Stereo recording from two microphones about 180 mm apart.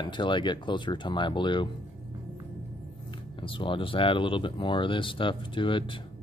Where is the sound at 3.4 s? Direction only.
30° left (ahead or behind).